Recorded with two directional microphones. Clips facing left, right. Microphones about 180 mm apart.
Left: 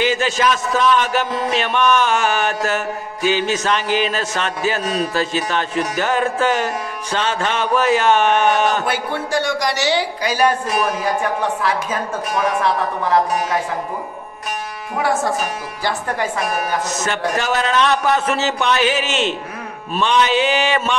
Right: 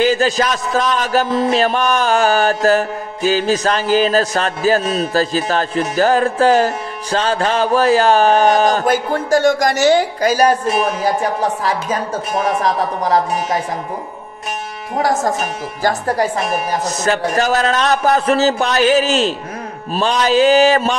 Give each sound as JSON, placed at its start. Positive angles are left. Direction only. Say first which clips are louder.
{"t": 0.0, "sound": "a man's voice", "louder": "right 3 dB", "side_deg": -35}
{"t": 10.7, "sound": "a man's voice", "louder": "right 3 dB", "side_deg": -30}
{"t": 15.0, "sound": "a man's voice", "louder": "right 2 dB", "side_deg": -40}